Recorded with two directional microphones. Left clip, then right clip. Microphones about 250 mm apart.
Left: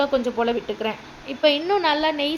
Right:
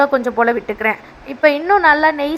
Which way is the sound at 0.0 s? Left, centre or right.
Centre.